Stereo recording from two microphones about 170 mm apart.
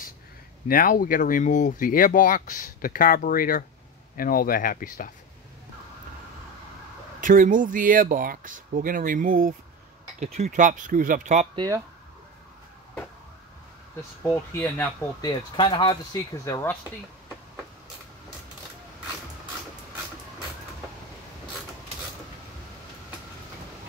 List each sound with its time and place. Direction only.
0.7 s speech: 55° left (ahead or behind)
7.2 s speech: 50° right (ahead or behind)
10.2 s speech: 40° right (ahead or behind)
11.5 s speech: 20° right (ahead or behind)
14.3 s speech: 15° left (ahead or behind)
15.5 s speech: 25° left (ahead or behind)